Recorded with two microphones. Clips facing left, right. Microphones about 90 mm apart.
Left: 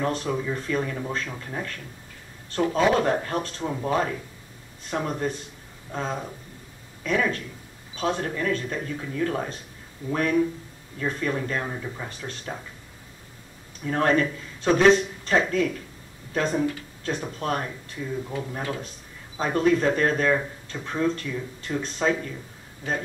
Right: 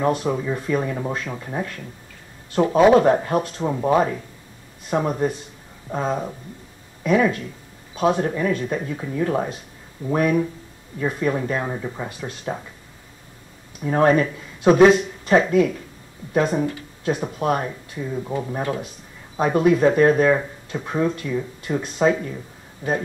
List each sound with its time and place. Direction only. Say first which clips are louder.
0.0 s speech: right 5 dB; 10° right (ahead or behind)
13.8 s speech: right 5 dB; 15° right (ahead or behind)